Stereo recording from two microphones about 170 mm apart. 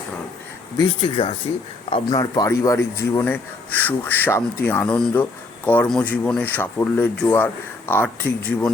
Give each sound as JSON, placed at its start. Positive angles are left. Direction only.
{"t": 0.8, "sound": "a man's voice", "side_deg": 30}